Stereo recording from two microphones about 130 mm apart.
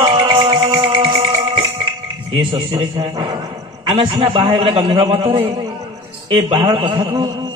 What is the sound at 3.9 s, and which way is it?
A man's voice, 40° right (ahead or behind).